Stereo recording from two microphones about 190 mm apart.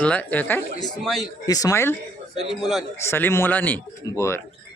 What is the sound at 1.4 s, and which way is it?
Speech, 20° left (ahead or behind).